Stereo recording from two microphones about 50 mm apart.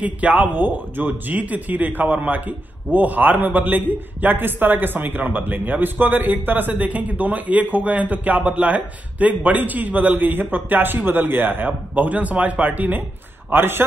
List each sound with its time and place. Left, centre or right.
0.0 s a man's voice: right
13.5 s a man's voice: right